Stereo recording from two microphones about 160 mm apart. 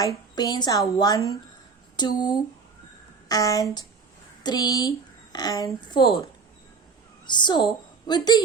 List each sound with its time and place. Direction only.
0.0 s speech: 20° left (ahead or behind)
7.3 s a woman's voice: 30° left (ahead or behind)